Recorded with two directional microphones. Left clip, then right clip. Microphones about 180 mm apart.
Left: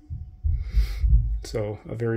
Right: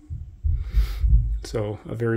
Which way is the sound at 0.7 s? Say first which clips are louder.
Right 1 dB; 15° right (ahead or behind).